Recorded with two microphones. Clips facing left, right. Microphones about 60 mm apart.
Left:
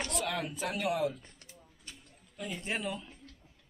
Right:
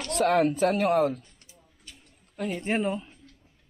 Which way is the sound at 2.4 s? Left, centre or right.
Right.